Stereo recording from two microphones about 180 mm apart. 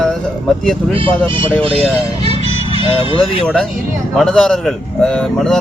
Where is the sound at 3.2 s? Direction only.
5° left (ahead or behind).